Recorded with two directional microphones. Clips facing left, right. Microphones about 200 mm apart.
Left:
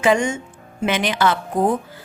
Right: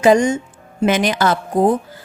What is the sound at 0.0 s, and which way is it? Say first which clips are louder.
A woman's voice: right 5 dB; 40° right (ahead or behind).